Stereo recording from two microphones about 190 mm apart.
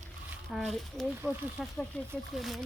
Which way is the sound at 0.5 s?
Centre (ahead or behind).